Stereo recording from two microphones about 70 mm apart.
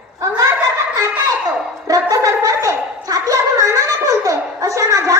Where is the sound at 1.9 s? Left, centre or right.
Right.